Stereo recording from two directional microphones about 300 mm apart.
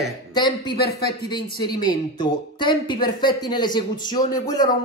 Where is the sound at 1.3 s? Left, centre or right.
Centre.